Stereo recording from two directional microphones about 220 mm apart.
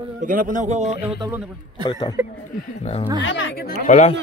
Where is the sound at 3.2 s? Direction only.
60° left (ahead or behind).